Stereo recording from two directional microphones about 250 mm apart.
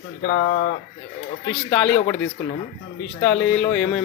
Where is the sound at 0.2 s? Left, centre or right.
Left.